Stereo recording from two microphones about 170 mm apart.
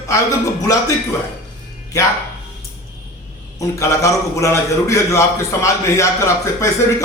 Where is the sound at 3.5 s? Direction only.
15° left (ahead or behind).